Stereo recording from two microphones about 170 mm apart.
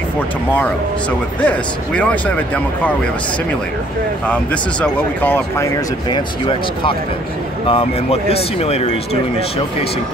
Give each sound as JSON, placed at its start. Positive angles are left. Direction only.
{"t": 1.4, "sound": "speech", "side_deg": 5}
{"t": 4.3, "sound": "speech", "side_deg": 5}
{"t": 6.0, "sound": "speech", "side_deg": 25}